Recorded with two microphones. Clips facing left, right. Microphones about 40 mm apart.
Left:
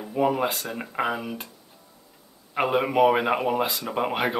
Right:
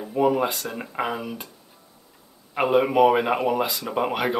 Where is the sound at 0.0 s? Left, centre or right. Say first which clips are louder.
Right 2 dB; centre.